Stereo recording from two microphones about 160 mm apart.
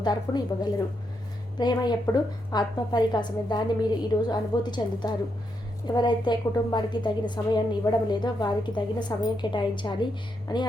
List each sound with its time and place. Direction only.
0.0 s a woman's voice: 25° left (ahead or behind)